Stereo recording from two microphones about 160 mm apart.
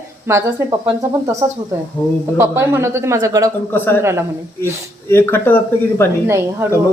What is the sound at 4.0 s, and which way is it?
Speech, 15° right (ahead or behind).